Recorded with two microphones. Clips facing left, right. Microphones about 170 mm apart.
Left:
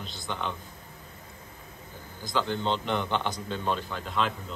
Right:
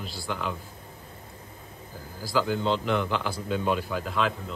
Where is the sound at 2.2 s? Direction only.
5° right (ahead or behind).